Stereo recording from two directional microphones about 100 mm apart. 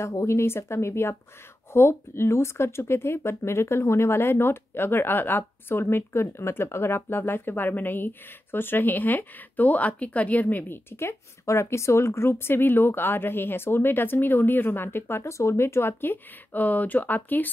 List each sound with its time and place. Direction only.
0.0 s speech: 30° left (ahead or behind)